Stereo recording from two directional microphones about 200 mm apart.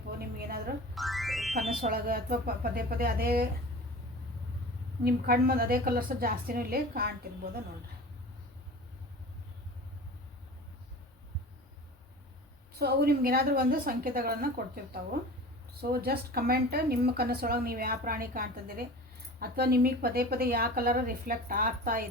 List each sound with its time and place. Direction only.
0.3 s a sound: 50° right (ahead or behind)
0.9 s music: centre (ahead or behind)
1.8 s a woman's voice: 50° right (ahead or behind)
5.0 s a woman's voice: 50° right (ahead or behind)
12.8 s a woman's voice: 50° right (ahead or behind)